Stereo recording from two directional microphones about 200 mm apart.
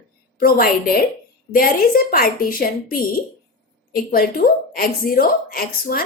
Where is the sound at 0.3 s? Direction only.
45° left (ahead or behind).